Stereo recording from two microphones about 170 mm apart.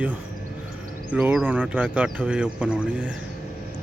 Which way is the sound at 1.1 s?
5° right (ahead or behind).